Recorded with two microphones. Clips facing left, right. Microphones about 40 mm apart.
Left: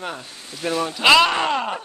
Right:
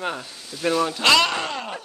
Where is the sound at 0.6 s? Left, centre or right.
Centre.